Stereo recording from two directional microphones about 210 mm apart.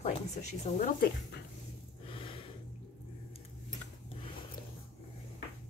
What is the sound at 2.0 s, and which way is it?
Snort, 25° left (ahead or behind).